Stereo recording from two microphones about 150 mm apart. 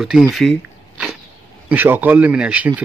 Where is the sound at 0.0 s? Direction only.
Centre (ahead or behind).